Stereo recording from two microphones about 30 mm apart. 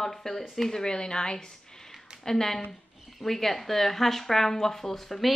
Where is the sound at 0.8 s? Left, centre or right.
Left.